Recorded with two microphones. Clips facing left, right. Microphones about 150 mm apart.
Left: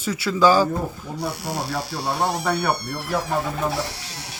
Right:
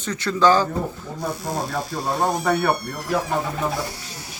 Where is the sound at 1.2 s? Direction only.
70° left (ahead or behind).